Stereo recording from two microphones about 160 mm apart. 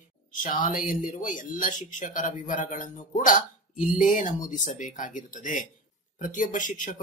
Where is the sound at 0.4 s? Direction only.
55° left (ahead or behind).